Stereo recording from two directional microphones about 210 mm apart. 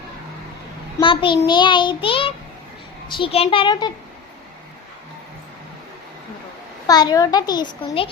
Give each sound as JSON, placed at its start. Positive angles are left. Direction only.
{"t": 1.0, "sound": "child singing", "side_deg": 25}
{"t": 6.8, "sound": "child singing", "side_deg": 20}